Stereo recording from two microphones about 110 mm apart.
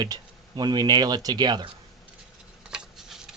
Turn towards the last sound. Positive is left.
turn(degrees=-5)  # may be behind; listen again after turning